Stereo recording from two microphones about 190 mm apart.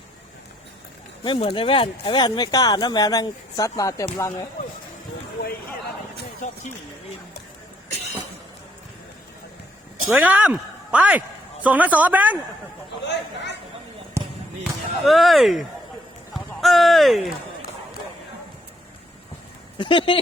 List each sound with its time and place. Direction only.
1.2 s speech: 30° left (ahead or behind)
10.1 s speech: 10° right (ahead or behind)
13.1 s a sound: 65° left (ahead or behind)
14.2 s basketball bounce: 15° right (ahead or behind)
14.6 s speech: centre (ahead or behind)
19.8 s speech: 25° left (ahead or behind)